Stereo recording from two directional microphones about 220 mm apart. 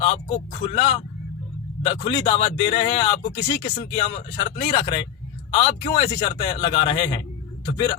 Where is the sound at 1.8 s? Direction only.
25° left (ahead or behind).